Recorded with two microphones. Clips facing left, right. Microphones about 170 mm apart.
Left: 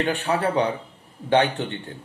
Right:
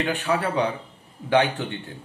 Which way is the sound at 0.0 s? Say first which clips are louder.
Left 1 dB; 35° left (ahead or behind).